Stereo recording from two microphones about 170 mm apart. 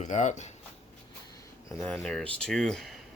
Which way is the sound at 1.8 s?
5° left (ahead or behind).